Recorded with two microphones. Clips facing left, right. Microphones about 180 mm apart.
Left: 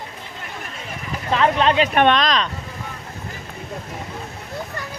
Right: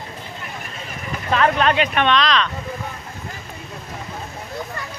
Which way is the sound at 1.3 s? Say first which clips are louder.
Even; 25° left (ahead or behind).